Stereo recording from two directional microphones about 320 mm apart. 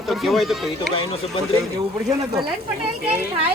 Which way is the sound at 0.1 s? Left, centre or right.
Centre.